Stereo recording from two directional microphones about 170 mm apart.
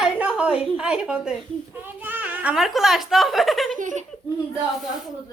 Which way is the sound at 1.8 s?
10° right (ahead or behind).